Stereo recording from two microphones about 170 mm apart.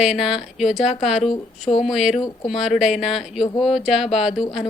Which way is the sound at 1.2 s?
40° left (ahead or behind).